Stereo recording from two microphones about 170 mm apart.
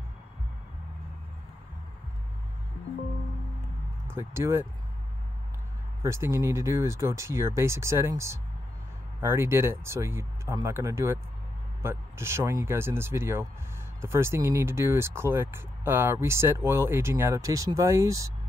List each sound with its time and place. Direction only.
4.1 s speech: 15° right (ahead or behind)
6.0 s speech: 15° right (ahead or behind)